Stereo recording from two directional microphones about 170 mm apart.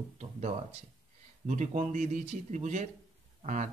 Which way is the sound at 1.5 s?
45° right (ahead or behind).